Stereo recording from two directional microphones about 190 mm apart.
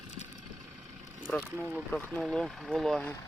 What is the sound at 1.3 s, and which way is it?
Speech, 5° left (ahead or behind).